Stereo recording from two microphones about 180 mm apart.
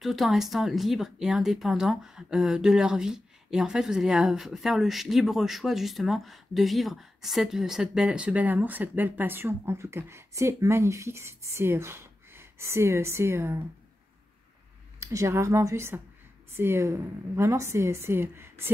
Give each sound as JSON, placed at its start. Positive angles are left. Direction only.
{"t": 0.0, "sound": "speech", "side_deg": 0}
{"t": 15.0, "sound": "a woman's voice", "side_deg": -15}